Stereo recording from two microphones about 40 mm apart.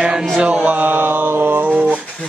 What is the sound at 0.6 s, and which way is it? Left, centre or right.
Mantra, right.